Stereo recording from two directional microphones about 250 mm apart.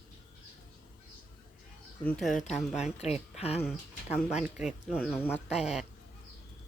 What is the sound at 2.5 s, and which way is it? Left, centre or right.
Speech, centre.